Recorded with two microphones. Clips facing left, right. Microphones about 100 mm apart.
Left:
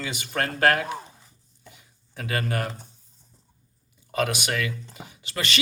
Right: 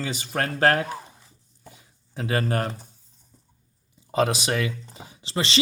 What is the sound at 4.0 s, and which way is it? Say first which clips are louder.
Speech: right 3 dB; 30° right (ahead or behind).